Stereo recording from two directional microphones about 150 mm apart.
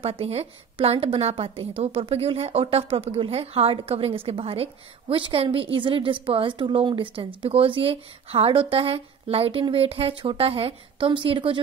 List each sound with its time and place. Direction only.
0.0 s speech: 40° right (ahead or behind)